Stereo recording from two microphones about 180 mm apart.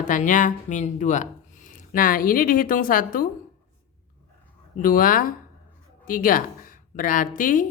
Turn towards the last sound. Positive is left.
turn(degrees=45)  # may be behind; listen again after turning